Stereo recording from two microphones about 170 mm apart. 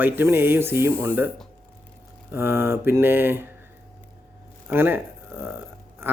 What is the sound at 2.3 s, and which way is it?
Speech, 15° right (ahead or behind).